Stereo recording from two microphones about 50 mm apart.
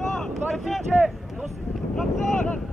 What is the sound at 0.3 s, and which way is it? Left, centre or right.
Vehicle, centre.